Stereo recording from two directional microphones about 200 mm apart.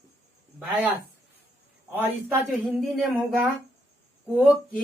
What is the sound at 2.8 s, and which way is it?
Speech, centre (ahead or behind).